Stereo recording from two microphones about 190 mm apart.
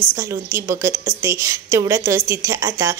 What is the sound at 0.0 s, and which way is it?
Speech, 15° right (ahead or behind).